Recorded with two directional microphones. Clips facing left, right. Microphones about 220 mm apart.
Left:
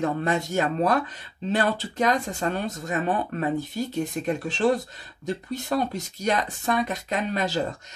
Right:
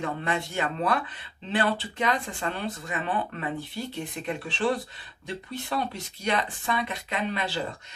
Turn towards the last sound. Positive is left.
turn(degrees=45)  # may be behind; listen again after turning